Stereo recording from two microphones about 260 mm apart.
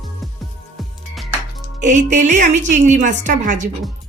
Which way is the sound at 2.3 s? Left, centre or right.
Right.